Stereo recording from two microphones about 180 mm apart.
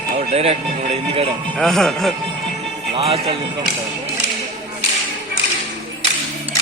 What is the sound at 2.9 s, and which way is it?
Speech, 30° right (ahead or behind).